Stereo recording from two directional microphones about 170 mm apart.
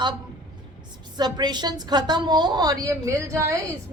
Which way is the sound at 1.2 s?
25° right (ahead or behind).